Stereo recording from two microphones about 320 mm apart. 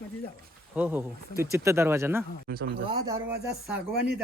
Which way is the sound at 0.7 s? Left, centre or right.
Centre.